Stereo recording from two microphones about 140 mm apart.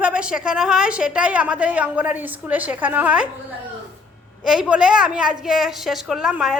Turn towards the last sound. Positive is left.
turn(degrees=-5)  # may be behind; listen again after turning